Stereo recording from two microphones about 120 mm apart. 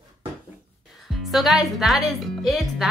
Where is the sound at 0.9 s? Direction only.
Centre (ahead or behind).